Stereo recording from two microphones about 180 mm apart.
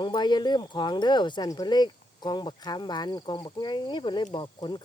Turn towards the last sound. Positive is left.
turn(degrees=25)  # may be behind; listen again after turning